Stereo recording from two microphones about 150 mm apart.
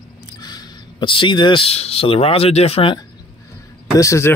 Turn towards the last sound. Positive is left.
turn(degrees=20)  # may be behind; listen again after turning